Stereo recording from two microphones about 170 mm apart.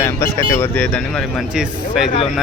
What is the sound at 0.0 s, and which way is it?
Speech, 15° left (ahead or behind).